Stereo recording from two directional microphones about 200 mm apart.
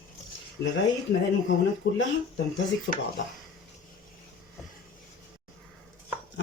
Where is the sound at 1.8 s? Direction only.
55° left (ahead or behind).